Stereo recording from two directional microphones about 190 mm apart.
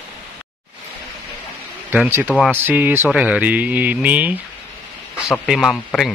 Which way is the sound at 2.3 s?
5° left (ahead or behind).